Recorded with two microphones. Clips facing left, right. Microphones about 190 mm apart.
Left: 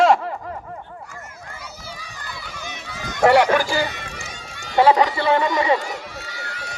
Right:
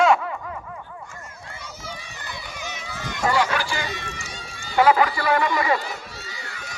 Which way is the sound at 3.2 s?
60° left (ahead or behind).